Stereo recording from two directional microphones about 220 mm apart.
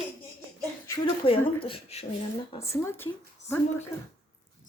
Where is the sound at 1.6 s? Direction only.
25° left (ahead or behind).